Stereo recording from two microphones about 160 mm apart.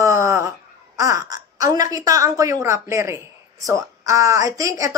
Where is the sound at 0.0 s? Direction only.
20° right (ahead or behind).